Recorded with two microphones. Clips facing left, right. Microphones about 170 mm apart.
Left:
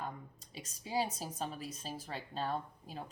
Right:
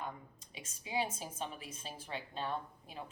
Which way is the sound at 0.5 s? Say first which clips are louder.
Left 2 dB; 35° left (ahead or behind).